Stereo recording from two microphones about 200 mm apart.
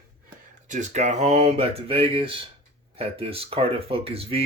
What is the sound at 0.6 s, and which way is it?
Speech, 40° right (ahead or behind).